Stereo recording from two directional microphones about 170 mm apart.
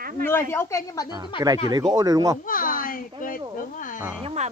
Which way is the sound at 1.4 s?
20° right (ahead or behind).